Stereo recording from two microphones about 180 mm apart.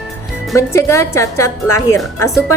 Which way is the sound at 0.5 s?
15° left (ahead or behind).